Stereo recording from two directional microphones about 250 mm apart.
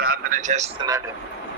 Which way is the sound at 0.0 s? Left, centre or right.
Right.